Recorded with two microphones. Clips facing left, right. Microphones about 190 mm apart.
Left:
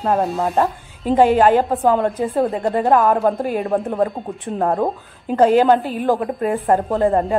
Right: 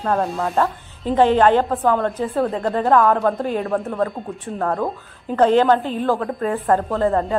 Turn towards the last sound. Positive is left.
turn(degrees=15)  # may be behind; listen again after turning